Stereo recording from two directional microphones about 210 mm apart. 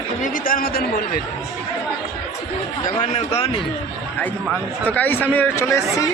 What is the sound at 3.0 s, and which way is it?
Speech, 30° left (ahead or behind).